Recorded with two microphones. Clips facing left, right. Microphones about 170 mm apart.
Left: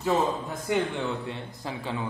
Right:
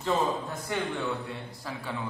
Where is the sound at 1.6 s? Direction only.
20° left (ahead or behind).